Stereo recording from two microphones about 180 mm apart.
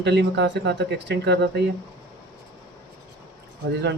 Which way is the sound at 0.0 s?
70° right (ahead or behind).